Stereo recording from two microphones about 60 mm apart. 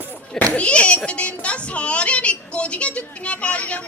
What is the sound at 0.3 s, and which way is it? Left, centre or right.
A child's voice, left.